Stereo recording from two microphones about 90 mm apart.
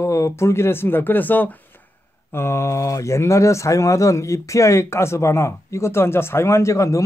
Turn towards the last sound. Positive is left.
turn(degrees=35)  # may be behind; listen again after turning